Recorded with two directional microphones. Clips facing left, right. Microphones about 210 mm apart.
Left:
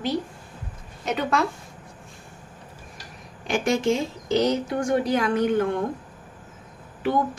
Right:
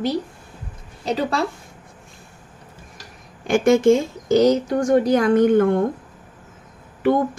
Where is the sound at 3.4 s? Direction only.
50° right (ahead or behind).